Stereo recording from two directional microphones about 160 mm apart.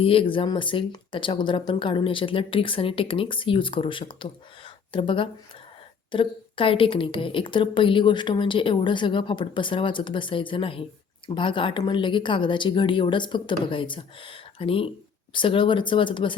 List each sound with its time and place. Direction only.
0.0 s a woman's voice: 35° left (ahead or behind)